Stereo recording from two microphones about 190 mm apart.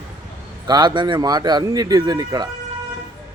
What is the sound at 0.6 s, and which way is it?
Speech, 20° right (ahead or behind).